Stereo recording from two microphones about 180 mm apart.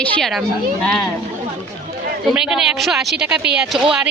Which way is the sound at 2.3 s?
5° right (ahead or behind).